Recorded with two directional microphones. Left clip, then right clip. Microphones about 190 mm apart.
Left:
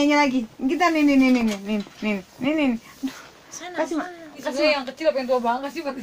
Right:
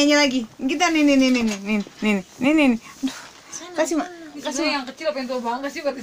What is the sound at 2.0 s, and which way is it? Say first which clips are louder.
Speech: right 4 dB; 35° right (ahead or behind).